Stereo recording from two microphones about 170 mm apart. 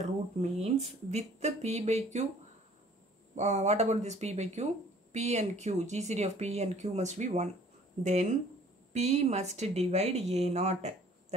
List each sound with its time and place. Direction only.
0.0 s speech: 40° right (ahead or behind)
3.3 s speech: 40° right (ahead or behind)